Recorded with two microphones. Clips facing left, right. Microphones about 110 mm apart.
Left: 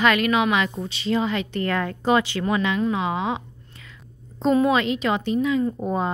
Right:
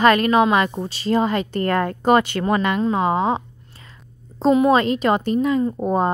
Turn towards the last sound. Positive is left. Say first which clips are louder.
# right 4 dB
turn(degrees=-35)  # may be behind; listen again after turning